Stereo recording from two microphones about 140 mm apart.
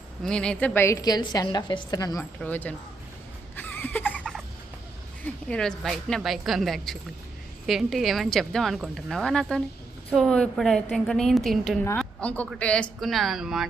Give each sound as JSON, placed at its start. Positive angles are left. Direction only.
{"t": 0.2, "sound": "a woman's voice", "side_deg": 5}
{"t": 2.4, "sound": "speech", "side_deg": 10}
{"t": 3.5, "sound": "a sound", "side_deg": 15}
{"t": 5.2, "sound": "a woman's voice", "side_deg": 5}